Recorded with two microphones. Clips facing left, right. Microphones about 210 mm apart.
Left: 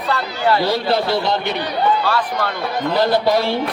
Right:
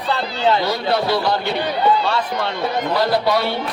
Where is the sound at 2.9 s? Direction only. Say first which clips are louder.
Left 3 dB; 25° left (ahead or behind).